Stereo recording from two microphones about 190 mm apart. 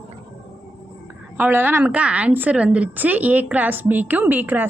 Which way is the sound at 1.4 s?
10° right (ahead or behind).